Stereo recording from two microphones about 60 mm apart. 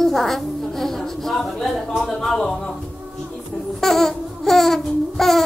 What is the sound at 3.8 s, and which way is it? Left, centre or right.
Babbling, centre.